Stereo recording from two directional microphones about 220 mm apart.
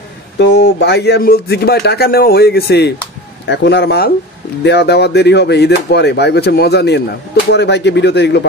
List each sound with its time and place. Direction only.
0.4 s speech: 50° left (ahead or behind)